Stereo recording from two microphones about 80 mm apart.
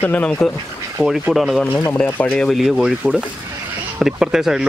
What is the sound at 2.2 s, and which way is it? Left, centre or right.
Speech, centre.